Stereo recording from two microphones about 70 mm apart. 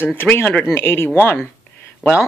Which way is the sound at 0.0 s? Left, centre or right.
Left.